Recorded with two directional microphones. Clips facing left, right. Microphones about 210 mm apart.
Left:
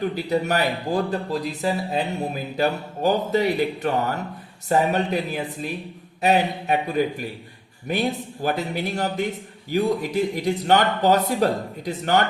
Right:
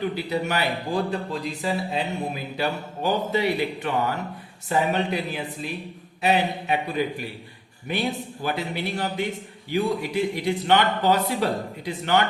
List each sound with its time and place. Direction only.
0.0 s speech: 40° left (ahead or behind)